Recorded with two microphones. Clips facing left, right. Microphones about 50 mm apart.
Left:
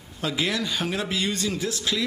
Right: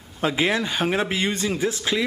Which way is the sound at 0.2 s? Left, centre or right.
Right.